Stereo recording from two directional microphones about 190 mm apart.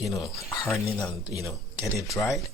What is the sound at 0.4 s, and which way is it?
Speech, 15° left (ahead or behind).